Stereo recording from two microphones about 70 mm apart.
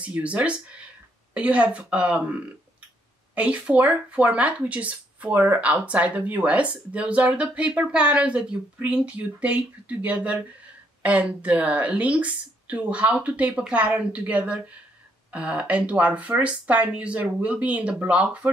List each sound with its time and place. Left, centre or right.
0.0 s a woman's voice: centre
3.3 s speech: centre